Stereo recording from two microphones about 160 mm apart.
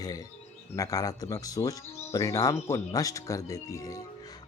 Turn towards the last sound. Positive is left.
turn(degrees=20)  # may be behind; listen again after turning